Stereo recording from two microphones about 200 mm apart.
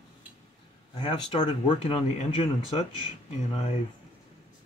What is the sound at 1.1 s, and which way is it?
Speech, 25° left (ahead or behind).